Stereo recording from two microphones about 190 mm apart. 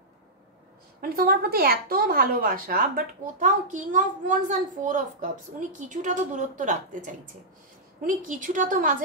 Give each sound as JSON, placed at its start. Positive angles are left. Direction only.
{"t": 1.0, "sound": "speech", "side_deg": -50}
{"t": 8.3, "sound": "speech", "side_deg": -45}